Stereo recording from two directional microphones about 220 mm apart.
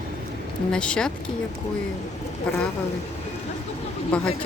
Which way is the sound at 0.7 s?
5° left (ahead or behind).